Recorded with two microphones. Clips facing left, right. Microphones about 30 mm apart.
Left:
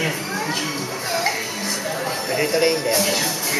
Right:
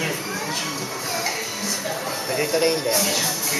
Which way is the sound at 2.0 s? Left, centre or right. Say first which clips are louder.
Left 4 dB; centre.